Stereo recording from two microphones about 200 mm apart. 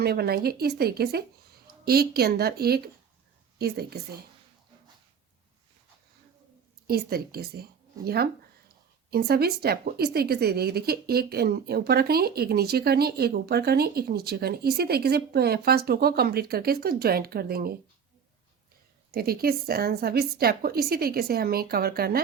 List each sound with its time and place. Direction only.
0.0 s a woman's voice: 50° right (ahead or behind)
6.8 s a woman's voice: 50° right (ahead or behind)
19.1 s a woman's voice: 50° right (ahead or behind)